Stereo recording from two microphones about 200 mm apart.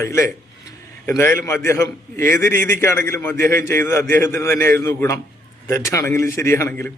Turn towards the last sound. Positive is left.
turn(degrees=10)  # may be behind; listen again after turning